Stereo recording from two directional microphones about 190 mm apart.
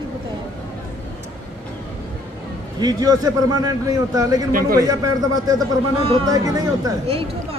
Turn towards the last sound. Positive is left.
turn(degrees=-20)  # may be behind; listen again after turning